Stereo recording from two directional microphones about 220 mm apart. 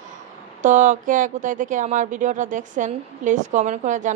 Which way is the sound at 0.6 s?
35° right (ahead or behind).